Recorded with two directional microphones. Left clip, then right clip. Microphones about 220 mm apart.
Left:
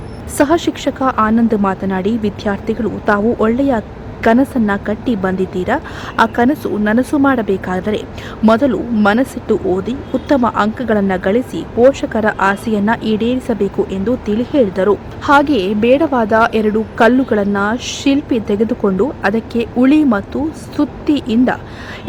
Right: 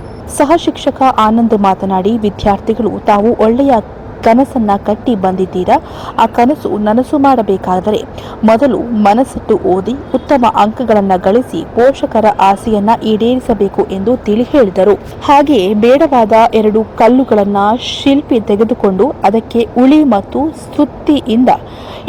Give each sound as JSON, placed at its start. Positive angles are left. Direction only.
{"t": 0.3, "sound": "a woman's voice", "side_deg": 0}
{"t": 6.3, "sound": "a woman's voice", "side_deg": 10}
{"t": 17.3, "sound": "speech", "side_deg": 15}
{"t": 17.7, "sound": "a woman's voice", "side_deg": 0}
{"t": 18.8, "sound": "speech", "side_deg": 10}
{"t": 19.2, "sound": "a woman's voice", "side_deg": -5}